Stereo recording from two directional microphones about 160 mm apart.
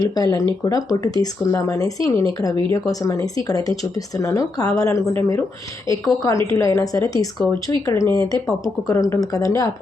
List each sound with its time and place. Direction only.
0.0 s speech: 20° left (ahead or behind)